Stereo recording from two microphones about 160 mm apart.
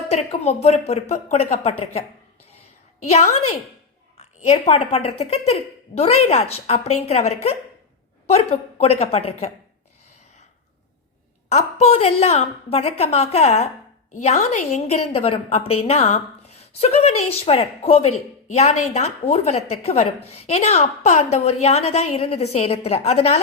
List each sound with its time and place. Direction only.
0.1 s speech: 40° left (ahead or behind)
3.0 s a woman's voice: 45° left (ahead or behind)
11.5 s a woman's voice: 40° left (ahead or behind)